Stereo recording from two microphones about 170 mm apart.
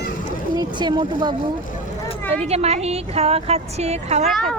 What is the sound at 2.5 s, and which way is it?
Speech, 40° right (ahead or behind).